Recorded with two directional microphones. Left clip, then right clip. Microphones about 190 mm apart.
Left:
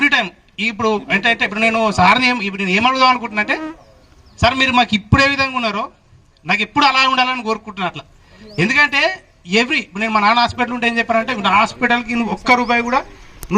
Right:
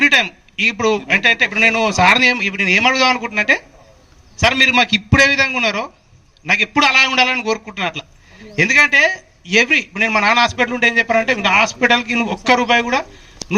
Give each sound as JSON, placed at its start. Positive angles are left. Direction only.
{"t": 0.0, "sound": "a man's voice", "side_deg": 25}